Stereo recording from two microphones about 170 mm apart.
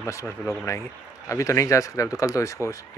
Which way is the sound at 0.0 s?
15° left (ahead or behind).